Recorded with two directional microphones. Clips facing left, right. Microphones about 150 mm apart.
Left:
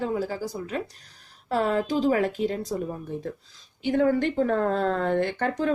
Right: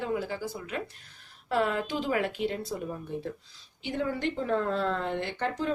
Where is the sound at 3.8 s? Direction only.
50° left (ahead or behind).